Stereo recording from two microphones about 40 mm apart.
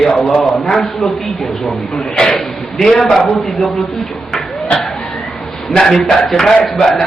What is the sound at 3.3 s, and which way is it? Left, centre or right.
Speech, centre.